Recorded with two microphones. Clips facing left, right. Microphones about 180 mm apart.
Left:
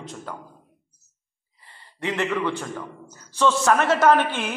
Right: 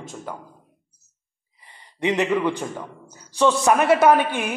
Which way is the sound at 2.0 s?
15° right (ahead or behind).